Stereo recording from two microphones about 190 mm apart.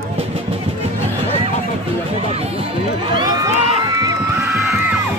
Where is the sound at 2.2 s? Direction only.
30° right (ahead or behind); by 4.9 s 15° right (ahead or behind).